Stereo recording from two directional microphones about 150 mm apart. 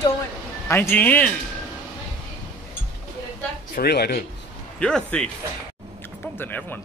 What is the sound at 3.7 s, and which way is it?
Speech, 90° left.